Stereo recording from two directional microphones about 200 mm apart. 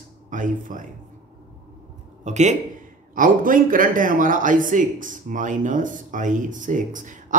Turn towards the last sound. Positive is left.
turn(degrees=-40)  # may be behind; listen again after turning